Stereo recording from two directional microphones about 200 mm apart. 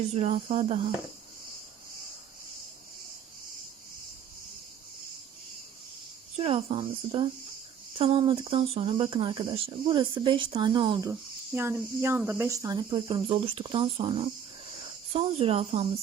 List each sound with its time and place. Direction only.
0.1 s speech: 35° right (ahead or behind)
6.3 s speech: 30° right (ahead or behind)
11.1 s speech: 10° right (ahead or behind); by 15.9 s 30° right (ahead or behind)